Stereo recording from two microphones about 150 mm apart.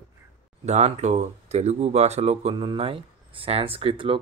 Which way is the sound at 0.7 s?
50° right (ahead or behind).